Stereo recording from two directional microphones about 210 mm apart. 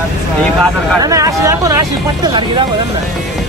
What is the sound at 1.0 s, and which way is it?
Speech, 15° right (ahead or behind).